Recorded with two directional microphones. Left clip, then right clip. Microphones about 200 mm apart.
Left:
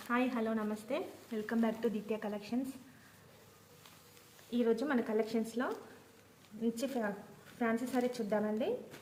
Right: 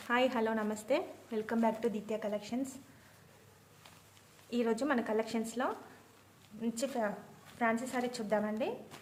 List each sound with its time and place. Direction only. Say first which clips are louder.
0.1 s speech: right 4 dB; 55° right (ahead or behind)
1.5 s speech: right 2 dB; 25° right (ahead or behind)
4.5 s speech: even; 50° right (ahead or behind)